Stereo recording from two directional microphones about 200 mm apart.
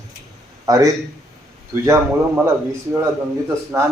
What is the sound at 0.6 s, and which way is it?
A man's voice, 15° right (ahead or behind).